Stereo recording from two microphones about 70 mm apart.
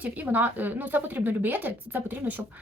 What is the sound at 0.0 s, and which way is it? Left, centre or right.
Speech, right.